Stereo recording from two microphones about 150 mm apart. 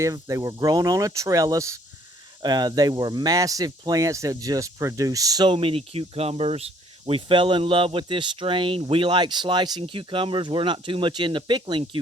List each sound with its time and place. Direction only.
0.0 s speech: 20° right (ahead or behind)